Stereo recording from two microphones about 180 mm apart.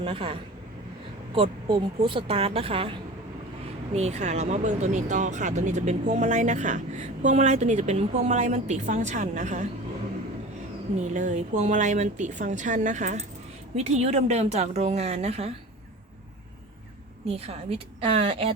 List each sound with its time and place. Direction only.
0.0 s speech: 30° right (ahead or behind)
1.4 s speech: 25° right (ahead or behind)
3.9 s speech: 40° right (ahead or behind)
11.1 s speech: 45° right (ahead or behind)
17.2 s speech: 35° right (ahead or behind)